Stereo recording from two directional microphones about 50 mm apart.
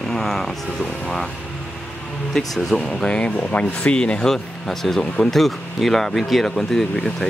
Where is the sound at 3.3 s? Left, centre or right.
Left.